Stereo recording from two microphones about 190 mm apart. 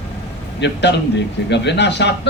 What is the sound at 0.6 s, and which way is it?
A man's voice, 65° left (ahead or behind).